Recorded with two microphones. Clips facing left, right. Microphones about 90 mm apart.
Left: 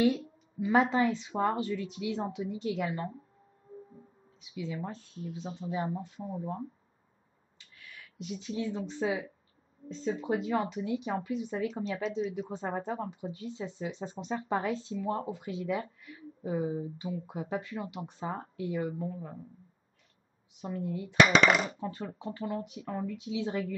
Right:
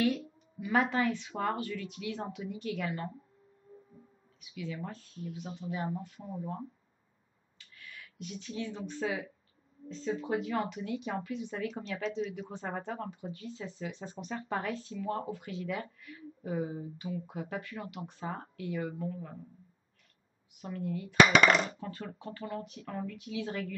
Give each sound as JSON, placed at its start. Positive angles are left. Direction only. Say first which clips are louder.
{"t": 0.0, "sound": "speech", "louder": "left 3 dB", "side_deg": 25}
{"t": 4.4, "sound": "speech", "louder": "left 2 dB", "side_deg": 25}
{"t": 8.2, "sound": "speech", "louder": "left 4 dB", "side_deg": 20}
{"t": 20.5, "sound": "speech", "louder": "left 2 dB", "side_deg": 20}